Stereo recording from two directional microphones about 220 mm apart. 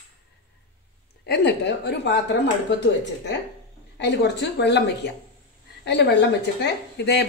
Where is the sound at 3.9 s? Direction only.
50° left (ahead or behind).